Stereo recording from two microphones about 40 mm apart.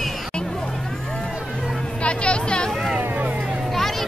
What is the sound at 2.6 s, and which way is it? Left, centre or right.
Vehicle, centre.